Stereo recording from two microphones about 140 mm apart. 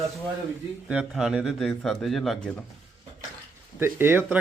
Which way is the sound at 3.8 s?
15° right (ahead or behind).